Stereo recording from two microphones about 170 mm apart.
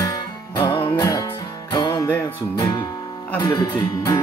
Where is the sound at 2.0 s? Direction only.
15° left (ahead or behind).